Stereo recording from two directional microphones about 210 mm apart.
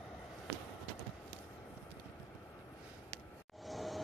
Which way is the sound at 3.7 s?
Centre (ahead or behind).